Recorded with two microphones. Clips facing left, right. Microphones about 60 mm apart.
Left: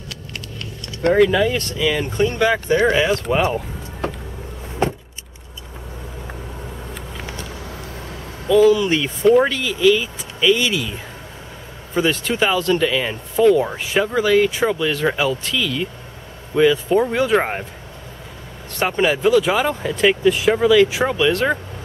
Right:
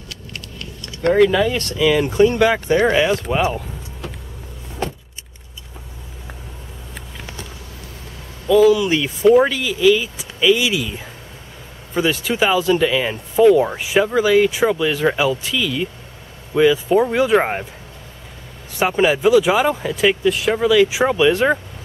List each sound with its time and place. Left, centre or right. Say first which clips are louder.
1.0 s speech: right 1 dB; centre
4.8 s vehicle: left 5 dB; left
8.5 s speech: right 1 dB; centre
18.8 s speech: right 2 dB; centre